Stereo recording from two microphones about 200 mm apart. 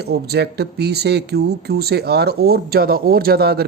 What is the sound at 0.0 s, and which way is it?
Speech, 55° right (ahead or behind).